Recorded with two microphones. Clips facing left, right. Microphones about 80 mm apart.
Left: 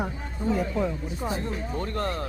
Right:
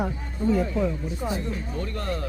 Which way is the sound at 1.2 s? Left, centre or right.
Left.